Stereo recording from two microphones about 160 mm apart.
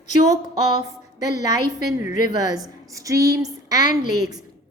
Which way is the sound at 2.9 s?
20° right (ahead or behind).